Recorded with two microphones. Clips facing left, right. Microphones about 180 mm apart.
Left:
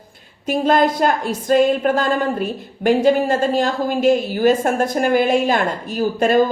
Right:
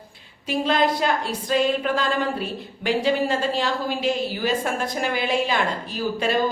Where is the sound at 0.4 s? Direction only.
45° left (ahead or behind).